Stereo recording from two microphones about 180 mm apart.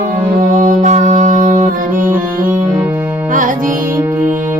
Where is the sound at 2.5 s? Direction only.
10° right (ahead or behind).